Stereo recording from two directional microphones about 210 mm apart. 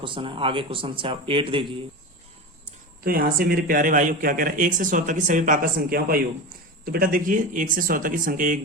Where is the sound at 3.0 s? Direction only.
45° right (ahead or behind).